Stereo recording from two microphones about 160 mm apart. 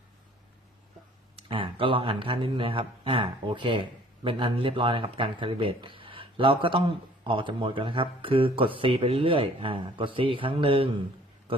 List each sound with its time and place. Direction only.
1.4 s speech: 35° right (ahead or behind)